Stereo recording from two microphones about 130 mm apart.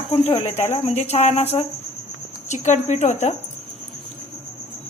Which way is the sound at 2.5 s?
65° left (ahead or behind).